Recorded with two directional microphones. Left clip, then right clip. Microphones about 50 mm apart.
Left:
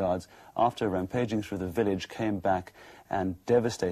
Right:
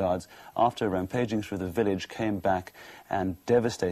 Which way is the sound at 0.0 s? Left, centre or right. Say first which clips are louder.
Right 1 dB; right.